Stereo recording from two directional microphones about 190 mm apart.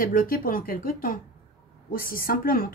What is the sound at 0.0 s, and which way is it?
A woman's voice, 50° left (ahead or behind).